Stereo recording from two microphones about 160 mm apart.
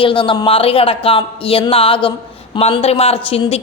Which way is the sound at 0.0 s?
30° left (ahead or behind).